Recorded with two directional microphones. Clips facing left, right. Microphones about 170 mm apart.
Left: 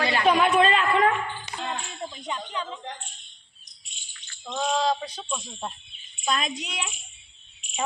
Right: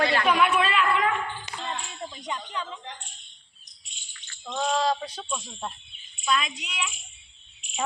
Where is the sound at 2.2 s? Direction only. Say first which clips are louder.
Left 1 dB; 20° left (ahead or behind).